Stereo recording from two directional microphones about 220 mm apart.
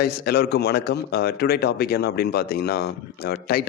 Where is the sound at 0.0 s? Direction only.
45° left (ahead or behind).